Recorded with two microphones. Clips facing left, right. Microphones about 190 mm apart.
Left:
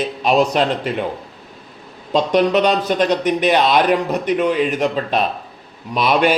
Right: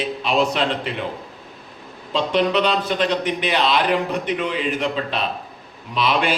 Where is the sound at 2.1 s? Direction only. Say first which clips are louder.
Left 4 dB; 45° left (ahead or behind).